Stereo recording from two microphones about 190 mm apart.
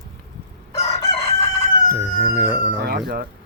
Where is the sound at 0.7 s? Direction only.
35° left (ahead or behind).